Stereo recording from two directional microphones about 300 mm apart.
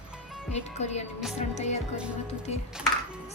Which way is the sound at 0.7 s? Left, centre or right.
Left.